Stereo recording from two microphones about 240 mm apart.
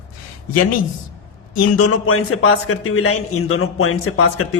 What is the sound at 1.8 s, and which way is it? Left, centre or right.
Speech, left.